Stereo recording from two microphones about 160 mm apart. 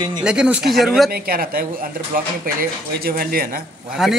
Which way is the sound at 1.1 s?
70° right (ahead or behind).